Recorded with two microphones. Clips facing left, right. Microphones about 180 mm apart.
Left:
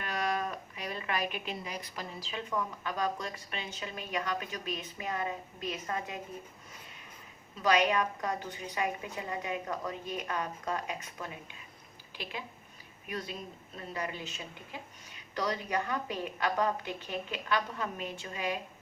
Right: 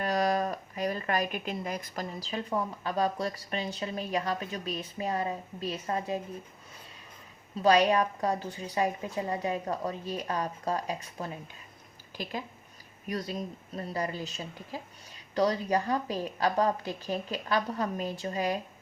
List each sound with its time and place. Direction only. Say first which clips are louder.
0.0 s speech: right 6 dB; 35° right (ahead or behind)
7.6 s a woman's voice: right 4 dB; 35° right (ahead or behind)